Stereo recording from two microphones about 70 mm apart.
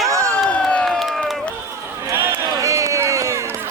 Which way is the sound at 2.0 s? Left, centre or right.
Right.